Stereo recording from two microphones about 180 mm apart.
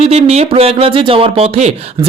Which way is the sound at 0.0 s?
35° right (ahead or behind).